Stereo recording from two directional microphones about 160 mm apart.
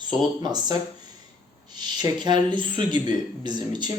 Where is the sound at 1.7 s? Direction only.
25° right (ahead or behind).